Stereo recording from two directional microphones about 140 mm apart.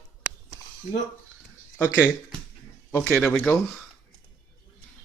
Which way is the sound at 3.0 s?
5° left (ahead or behind).